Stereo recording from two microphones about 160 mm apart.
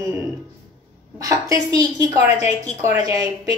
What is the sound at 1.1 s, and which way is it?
A woman's voice, 20° right (ahead or behind).